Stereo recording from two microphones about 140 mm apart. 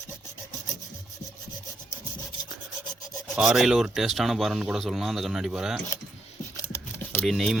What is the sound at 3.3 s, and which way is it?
Speech, 5° right (ahead or behind).